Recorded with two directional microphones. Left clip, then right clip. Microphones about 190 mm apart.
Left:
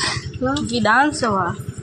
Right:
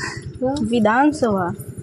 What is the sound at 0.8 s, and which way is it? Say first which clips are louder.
Speech: left 1 dB; 50° right (ahead or behind).